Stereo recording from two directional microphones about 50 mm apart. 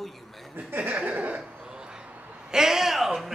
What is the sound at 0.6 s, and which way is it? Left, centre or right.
Chuckle, right.